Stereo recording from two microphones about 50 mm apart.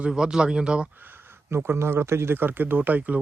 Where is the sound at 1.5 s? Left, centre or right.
Right.